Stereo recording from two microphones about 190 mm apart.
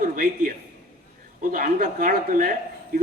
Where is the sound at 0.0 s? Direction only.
45° right (ahead or behind).